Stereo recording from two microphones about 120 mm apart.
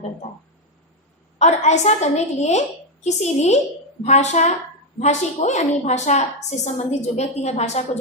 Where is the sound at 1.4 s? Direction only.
70° left (ahead or behind).